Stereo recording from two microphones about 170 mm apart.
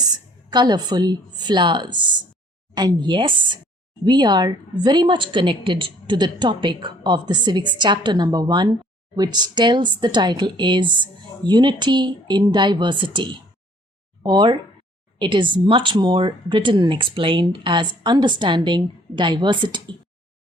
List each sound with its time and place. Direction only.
0.0 s a woman's voice: 25° right (ahead or behind)